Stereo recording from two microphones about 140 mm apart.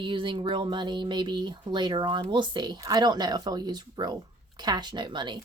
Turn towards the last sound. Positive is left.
turn(degrees=-30)  # may be behind; listen again after turning